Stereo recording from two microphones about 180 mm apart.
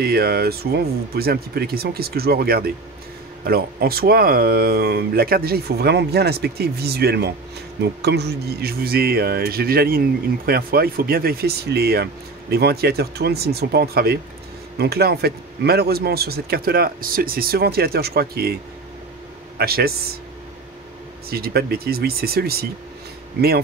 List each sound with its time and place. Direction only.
0.0 s speech: 60° right (ahead or behind)
19.6 s speech: 60° right (ahead or behind)
21.3 s speech: 60° right (ahead or behind)